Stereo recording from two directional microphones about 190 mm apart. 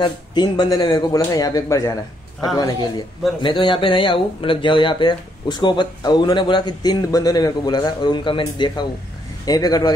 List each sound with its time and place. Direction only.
0.0 s speech: 25° left (ahead or behind)